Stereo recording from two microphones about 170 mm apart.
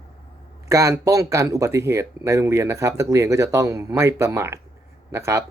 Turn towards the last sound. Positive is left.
turn(degrees=-15)  # may be behind; listen again after turning